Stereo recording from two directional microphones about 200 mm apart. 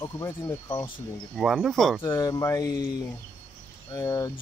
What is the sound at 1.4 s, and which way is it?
Speech, centre (ahead or behind).